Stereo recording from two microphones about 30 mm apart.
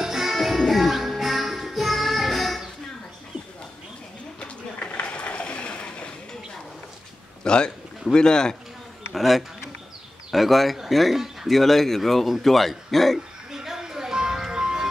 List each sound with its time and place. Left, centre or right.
0.0 s music: centre
4.7 s a sound: left
7.4 s a man's voice: left
9.1 s speech: centre
13.5 s music: centre